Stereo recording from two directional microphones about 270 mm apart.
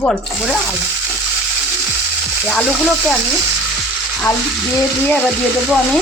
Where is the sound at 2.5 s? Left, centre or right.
Centre.